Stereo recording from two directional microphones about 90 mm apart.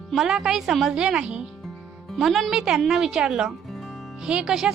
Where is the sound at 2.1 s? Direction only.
Centre (ahead or behind).